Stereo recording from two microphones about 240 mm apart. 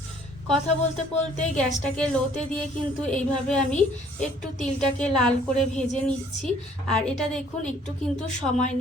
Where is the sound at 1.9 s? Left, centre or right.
Centre.